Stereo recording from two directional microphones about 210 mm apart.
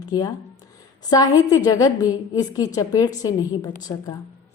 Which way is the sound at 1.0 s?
15° left (ahead or behind).